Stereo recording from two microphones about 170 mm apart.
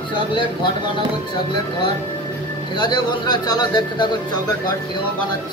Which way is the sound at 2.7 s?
25° left (ahead or behind).